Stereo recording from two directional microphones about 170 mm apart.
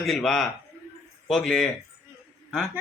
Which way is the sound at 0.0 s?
Centre (ahead or behind).